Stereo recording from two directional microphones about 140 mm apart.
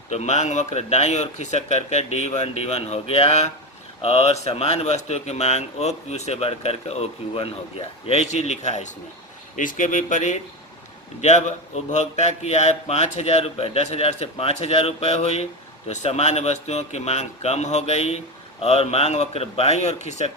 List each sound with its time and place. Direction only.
0.1 s speech: 55° left (ahead or behind)